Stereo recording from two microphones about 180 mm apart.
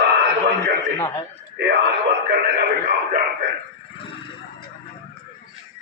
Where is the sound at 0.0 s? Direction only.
70° right (ahead or behind).